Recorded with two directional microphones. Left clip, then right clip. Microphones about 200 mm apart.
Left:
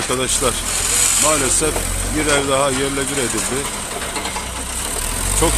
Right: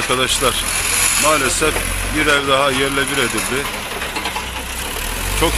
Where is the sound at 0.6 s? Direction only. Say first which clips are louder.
Right 1 dB; 55° left (ahead or behind).